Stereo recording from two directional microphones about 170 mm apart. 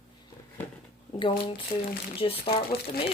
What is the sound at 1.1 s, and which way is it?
Speech, 30° left (ahead or behind).